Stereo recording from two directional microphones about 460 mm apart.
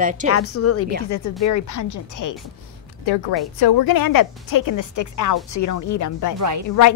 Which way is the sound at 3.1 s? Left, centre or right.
Left.